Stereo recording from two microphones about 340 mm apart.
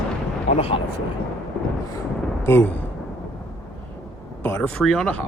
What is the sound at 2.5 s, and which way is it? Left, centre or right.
Speech, centre.